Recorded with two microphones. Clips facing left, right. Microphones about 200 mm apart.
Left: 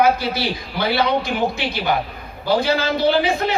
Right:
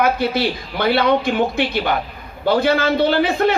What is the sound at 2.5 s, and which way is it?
Speech, 55° right (ahead or behind).